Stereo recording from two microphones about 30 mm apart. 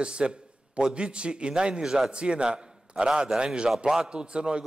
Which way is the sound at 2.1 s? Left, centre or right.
Right.